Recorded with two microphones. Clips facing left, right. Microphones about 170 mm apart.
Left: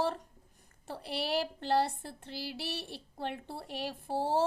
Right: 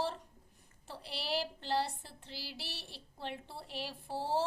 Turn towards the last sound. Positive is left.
turn(degrees=50)  # may be behind; listen again after turning